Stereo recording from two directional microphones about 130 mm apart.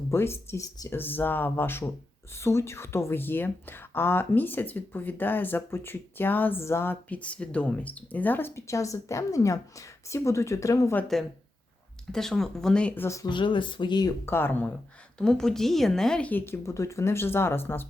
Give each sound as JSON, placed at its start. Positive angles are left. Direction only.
{"t": 0.1, "sound": "speech", "side_deg": 20}
{"t": 12.1, "sound": "speech", "side_deg": 5}
{"t": 13.1, "sound": "speech", "side_deg": 25}
{"t": 13.3, "sound": "speech", "side_deg": 40}
{"t": 14.3, "sound": "speech", "side_deg": 15}
{"t": 15.2, "sound": "speech", "side_deg": 5}